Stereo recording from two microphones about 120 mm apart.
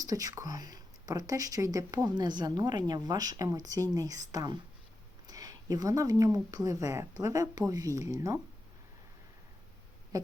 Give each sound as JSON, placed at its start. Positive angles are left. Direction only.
{"t": 0.0, "sound": "speech", "side_deg": -30}